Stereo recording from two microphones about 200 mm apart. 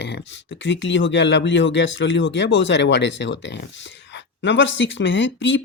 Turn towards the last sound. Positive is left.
turn(degrees=65)  # may be behind; listen again after turning